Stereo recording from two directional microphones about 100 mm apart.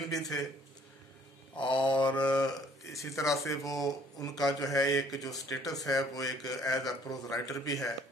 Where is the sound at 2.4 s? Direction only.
35° left (ahead or behind).